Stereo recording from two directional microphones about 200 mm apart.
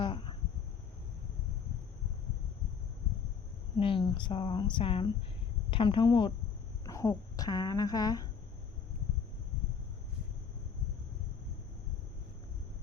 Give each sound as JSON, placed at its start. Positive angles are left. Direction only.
{"t": 0.0, "sound": "insect", "side_deg": 25}
{"t": 3.8, "sound": "speech", "side_deg": 25}